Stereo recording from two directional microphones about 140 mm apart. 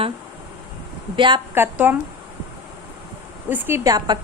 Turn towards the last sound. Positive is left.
turn(degrees=-30)  # may be behind; listen again after turning